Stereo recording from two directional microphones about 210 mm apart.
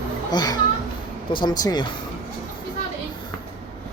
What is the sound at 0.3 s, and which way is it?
Speech, 20° left (ahead or behind).